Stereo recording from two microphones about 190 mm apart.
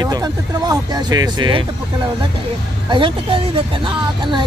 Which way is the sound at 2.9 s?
25° right (ahead or behind).